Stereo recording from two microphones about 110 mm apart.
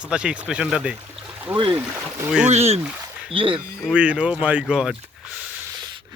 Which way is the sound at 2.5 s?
75° right (ahead or behind).